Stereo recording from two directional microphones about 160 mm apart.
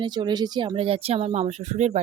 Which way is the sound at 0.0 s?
25° right (ahead or behind).